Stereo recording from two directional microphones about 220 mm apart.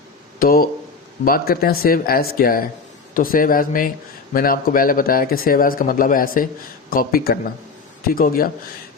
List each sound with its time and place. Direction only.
0.3 s speech: 40° left (ahead or behind)